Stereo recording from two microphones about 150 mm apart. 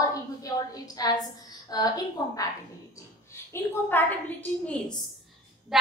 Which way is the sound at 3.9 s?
10° left (ahead or behind).